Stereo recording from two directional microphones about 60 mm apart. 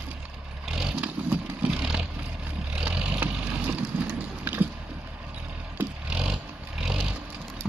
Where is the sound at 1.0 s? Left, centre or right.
Right.